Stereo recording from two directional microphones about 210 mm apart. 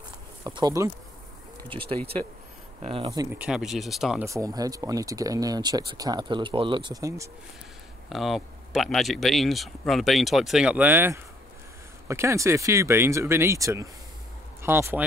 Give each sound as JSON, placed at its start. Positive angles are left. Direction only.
{"t": 0.4, "sound": "speech", "side_deg": -20}
{"t": 2.8, "sound": "speech", "side_deg": -25}
{"t": 4.3, "sound": "speech", "side_deg": -15}
{"t": 8.1, "sound": "speech", "side_deg": 0}